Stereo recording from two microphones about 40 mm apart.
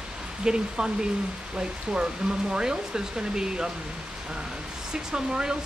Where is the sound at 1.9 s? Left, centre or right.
Centre.